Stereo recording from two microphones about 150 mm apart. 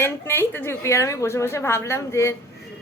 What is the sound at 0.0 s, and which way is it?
A woman's voice, 15° left (ahead or behind).